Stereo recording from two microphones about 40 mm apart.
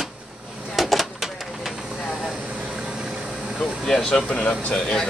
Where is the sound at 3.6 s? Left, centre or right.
Centre.